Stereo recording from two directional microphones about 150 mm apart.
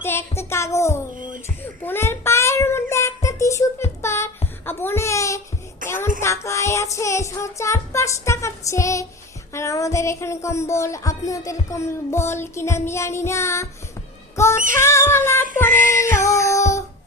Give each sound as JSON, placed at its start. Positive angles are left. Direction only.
{"t": 0.0, "sound": "music", "side_deg": 15}
{"t": 1.8, "sound": "child singing", "side_deg": 15}
{"t": 4.6, "sound": "a sound", "side_deg": 15}
{"t": 5.8, "sound": "music", "side_deg": 15}
{"t": 9.5, "sound": "speech", "side_deg": 20}
{"t": 14.8, "sound": "music", "side_deg": 20}